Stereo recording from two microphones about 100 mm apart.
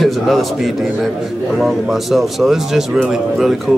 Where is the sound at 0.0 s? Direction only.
Centre (ahead or behind).